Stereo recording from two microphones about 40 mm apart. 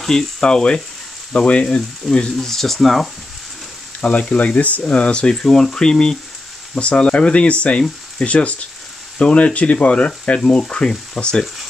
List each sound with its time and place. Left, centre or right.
0.1 s speech: centre
2.0 s speech: centre
4.0 s speech: left
5.2 s speech: centre
6.7 s speech: left
10.4 s speech: centre